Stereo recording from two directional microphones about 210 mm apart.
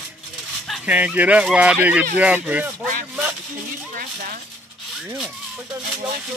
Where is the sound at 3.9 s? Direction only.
40° right (ahead or behind).